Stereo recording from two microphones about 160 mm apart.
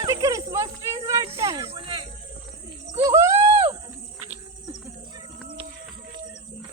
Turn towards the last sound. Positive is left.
turn(degrees=-25)  # may be behind; listen again after turning